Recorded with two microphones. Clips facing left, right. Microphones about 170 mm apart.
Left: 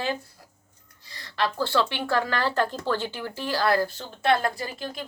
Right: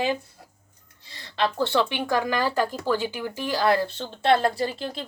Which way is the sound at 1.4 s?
20° right (ahead or behind).